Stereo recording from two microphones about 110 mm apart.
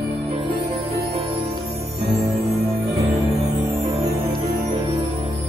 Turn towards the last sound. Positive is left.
turn(degrees=-55)  # may be behind; listen again after turning